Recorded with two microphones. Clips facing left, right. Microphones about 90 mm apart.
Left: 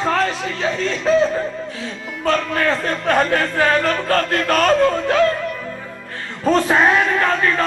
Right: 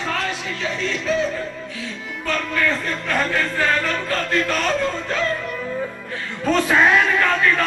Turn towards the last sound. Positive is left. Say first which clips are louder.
# left 1 dB
turn(degrees=35)  # may be behind; listen again after turning